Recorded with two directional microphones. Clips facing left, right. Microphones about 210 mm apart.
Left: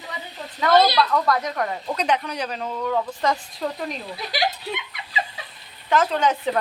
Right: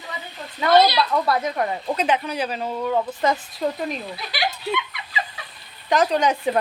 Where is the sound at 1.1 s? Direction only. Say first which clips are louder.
Even; 30° right (ahead or behind).